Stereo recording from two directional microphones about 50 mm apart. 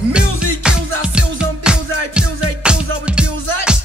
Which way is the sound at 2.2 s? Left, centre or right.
Centre.